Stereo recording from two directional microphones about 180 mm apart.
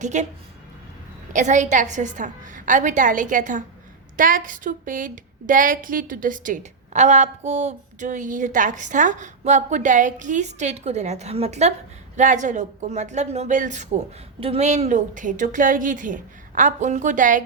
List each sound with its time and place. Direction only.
0.0 s speech: 40° right (ahead or behind)
1.3 s a woman's voice: 45° right (ahead or behind)